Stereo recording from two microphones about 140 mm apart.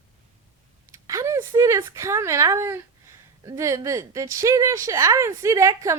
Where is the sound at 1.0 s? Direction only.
20° right (ahead or behind).